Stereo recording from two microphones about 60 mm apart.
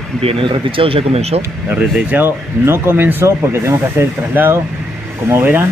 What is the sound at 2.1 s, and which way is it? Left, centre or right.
Speech, right.